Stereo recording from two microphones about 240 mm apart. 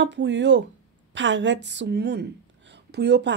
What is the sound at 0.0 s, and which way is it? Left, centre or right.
A woman's voice, right.